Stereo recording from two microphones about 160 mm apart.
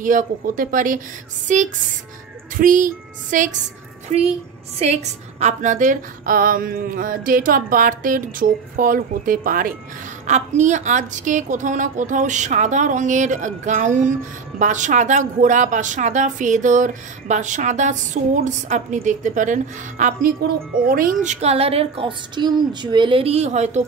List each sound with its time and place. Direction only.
0.0 s a woman's voice: 55° right (ahead or behind)
5.4 s speech: 50° right (ahead or behind)
10.2 s a woman's voice: 50° right (ahead or behind)